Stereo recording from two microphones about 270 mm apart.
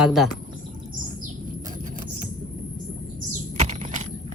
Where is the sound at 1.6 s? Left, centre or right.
Right.